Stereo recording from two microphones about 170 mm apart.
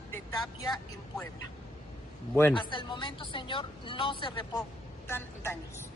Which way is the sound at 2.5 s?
30° left (ahead or behind).